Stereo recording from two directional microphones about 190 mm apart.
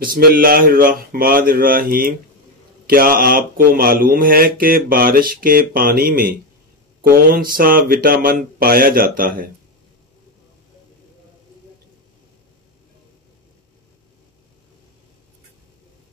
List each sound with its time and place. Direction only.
0.0 s speech: 50° right (ahead or behind)